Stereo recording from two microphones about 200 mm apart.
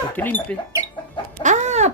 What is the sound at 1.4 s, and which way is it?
Chicken, 35° right (ahead or behind).